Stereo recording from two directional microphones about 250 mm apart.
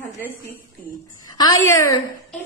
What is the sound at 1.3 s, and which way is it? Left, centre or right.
Speech, centre.